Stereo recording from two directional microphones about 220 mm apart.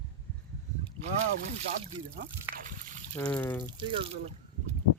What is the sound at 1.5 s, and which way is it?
Speech, 35° right (ahead or behind).